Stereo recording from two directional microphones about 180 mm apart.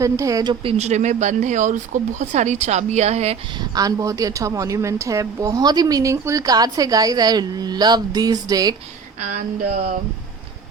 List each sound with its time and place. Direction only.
0.0 s speech: 20° right (ahead or behind)
0.6 s speech: 35° right (ahead or behind)
3.6 s a woman's voice: 20° right (ahead or behind)
9.2 s a sound: 45° right (ahead or behind)